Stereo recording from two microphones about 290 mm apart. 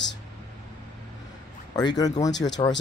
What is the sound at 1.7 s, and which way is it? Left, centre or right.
Speech, centre.